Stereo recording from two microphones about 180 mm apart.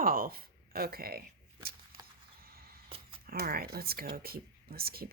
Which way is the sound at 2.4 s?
55° right (ahead or behind).